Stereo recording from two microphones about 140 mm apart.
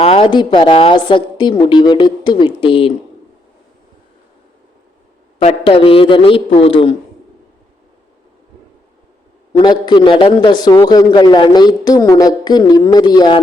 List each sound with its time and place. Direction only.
0.0 s a man's voice: 40° left (ahead or behind)
5.4 s a man's voice: 45° left (ahead or behind)
9.5 s a man's voice: 35° left (ahead or behind)